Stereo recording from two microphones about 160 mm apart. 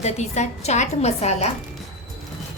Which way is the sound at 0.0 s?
45° left (ahead or behind).